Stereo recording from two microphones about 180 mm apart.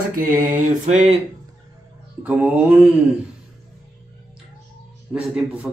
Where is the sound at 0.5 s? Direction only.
40° right (ahead or behind).